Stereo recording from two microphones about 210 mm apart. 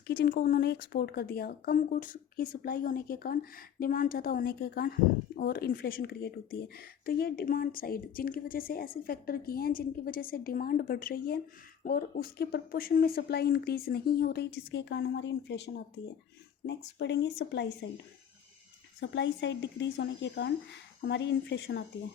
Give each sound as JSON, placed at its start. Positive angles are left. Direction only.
{"t": 0.1, "sound": "speech", "side_deg": 45}
{"t": 18.9, "sound": "a woman's voice", "side_deg": 60}